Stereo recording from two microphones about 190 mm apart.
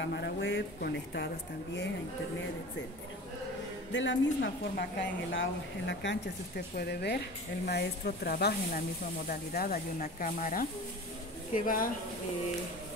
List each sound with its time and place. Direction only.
0.0 s speech: 65° left (ahead or behind)
3.9 s a woman's voice: 75° left (ahead or behind); by 11.9 s 45° left (ahead or behind)